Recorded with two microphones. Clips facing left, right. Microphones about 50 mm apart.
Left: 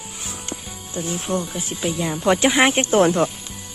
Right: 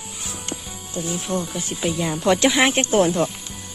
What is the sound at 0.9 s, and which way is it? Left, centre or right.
Speech, left.